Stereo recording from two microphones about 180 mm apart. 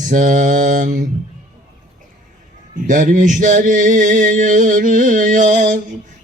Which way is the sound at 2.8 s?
45° right (ahead or behind).